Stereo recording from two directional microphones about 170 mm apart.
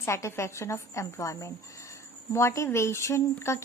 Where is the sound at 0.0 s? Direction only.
15° left (ahead or behind).